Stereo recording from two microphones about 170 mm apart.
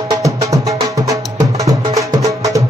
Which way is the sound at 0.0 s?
20° right (ahead or behind).